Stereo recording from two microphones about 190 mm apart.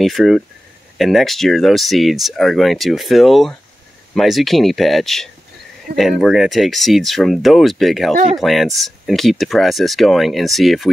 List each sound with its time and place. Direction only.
0.0 s speech: centre (ahead or behind)